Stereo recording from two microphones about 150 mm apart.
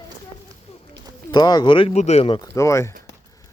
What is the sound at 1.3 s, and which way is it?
Speech, 25° left (ahead or behind).